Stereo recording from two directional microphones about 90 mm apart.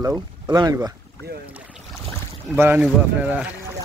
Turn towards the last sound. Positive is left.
turn(degrees=-15)  # may be behind; listen again after turning